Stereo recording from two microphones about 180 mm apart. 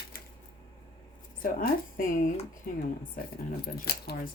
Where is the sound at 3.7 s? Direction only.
60° left (ahead or behind).